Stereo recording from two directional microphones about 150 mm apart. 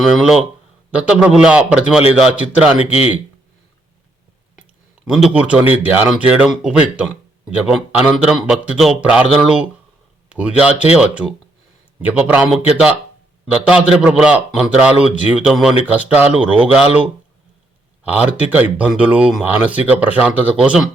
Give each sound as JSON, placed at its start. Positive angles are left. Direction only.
{"t": 0.0, "sound": "a man's voice", "side_deg": -5}
{"t": 2.9, "sound": "speech", "side_deg": 40}
{"t": 5.1, "sound": "a man's voice", "side_deg": -5}
{"t": 18.0, "sound": "a man's voice", "side_deg": -10}